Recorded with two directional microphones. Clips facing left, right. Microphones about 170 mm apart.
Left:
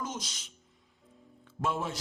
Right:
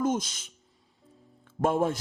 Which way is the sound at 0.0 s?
50° right (ahead or behind).